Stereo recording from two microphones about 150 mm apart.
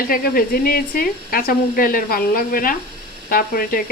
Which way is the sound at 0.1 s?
80° left.